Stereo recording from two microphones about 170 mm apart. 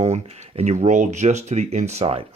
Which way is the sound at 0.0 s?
40° right (ahead or behind).